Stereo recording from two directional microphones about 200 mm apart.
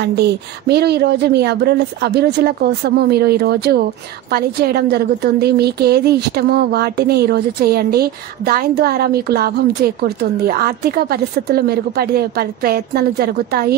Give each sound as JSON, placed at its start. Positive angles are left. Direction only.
{"t": 0.0, "sound": "a woman's voice", "side_deg": -55}